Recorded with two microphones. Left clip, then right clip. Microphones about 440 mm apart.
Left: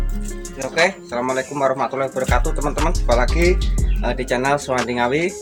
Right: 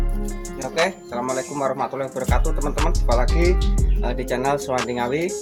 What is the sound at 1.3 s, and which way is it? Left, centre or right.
Speech, right.